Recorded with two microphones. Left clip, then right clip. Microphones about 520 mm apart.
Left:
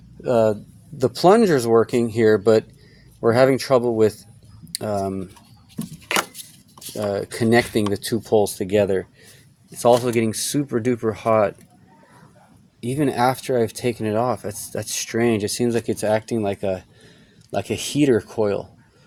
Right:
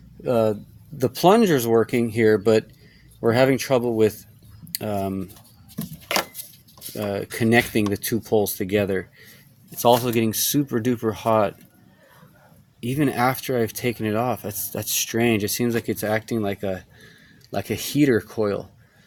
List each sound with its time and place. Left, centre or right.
0.2 s speech: right
6.9 s speech: right
12.8 s speech: right